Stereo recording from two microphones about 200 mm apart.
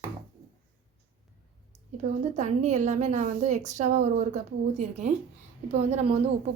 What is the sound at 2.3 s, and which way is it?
A woman's voice, 35° right (ahead or behind).